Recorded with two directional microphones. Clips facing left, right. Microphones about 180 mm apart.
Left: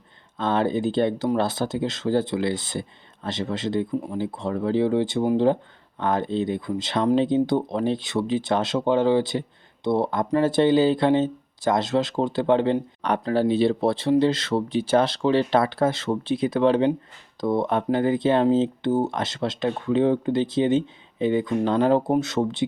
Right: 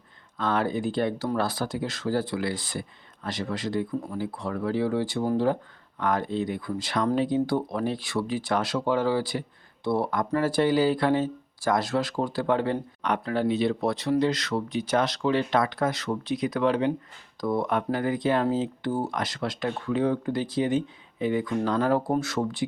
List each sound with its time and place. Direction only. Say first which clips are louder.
0.3 s speech: left 4 dB; 25° left (ahead or behind)